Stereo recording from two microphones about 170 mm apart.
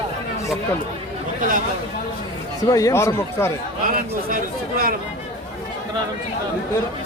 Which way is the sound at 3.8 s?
55° right (ahead or behind).